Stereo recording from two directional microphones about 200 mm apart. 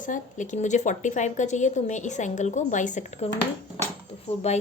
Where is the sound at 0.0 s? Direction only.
40° left (ahead or behind).